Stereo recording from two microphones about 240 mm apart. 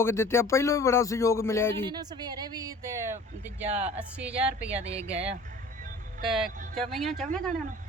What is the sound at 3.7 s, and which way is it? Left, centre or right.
Speech, right.